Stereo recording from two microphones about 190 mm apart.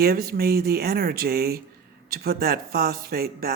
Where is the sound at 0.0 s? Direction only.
55° right (ahead or behind).